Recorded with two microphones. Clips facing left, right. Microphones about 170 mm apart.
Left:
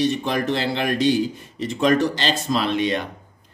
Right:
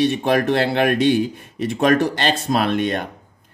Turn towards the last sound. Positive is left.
turn(degrees=-50)  # may be behind; listen again after turning